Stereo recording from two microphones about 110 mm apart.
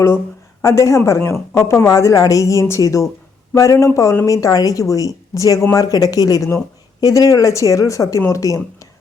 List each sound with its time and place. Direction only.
0.6 s a woman's voice: 25° left (ahead or behind)